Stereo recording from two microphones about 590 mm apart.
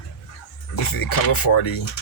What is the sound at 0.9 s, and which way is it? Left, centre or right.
Speech, left.